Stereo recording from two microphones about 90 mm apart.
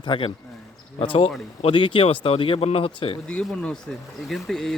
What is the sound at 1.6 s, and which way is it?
Speech, 65° left (ahead or behind).